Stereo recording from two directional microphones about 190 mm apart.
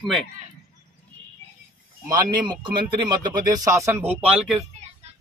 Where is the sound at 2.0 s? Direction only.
25° right (ahead or behind); by 4.5 s 5° right (ahead or behind).